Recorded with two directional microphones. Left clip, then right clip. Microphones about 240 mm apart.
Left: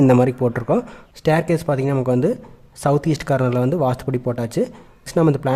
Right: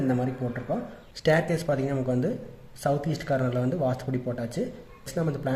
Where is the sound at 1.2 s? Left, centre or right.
Left.